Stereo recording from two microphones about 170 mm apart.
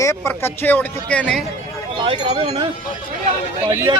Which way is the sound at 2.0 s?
35° right (ahead or behind).